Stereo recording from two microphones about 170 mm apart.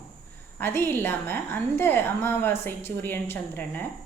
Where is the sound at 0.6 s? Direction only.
10° left (ahead or behind).